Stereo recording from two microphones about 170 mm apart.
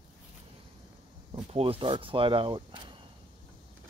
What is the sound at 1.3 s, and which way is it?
Speech, 35° right (ahead or behind).